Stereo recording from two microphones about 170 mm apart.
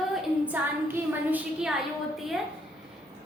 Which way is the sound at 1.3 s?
5° right (ahead or behind).